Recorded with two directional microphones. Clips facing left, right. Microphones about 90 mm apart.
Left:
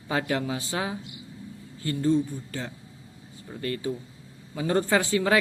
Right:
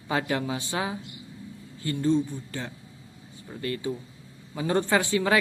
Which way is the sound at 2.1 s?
25° right (ahead or behind).